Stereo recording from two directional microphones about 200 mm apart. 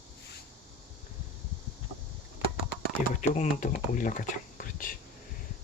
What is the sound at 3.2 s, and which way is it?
Speech, 35° left (ahead or behind).